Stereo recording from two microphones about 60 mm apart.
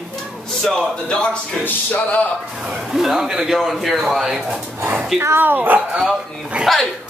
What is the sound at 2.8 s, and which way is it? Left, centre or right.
Speech, centre.